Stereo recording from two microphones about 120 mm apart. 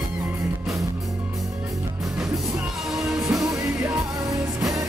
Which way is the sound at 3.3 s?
30° right (ahead or behind).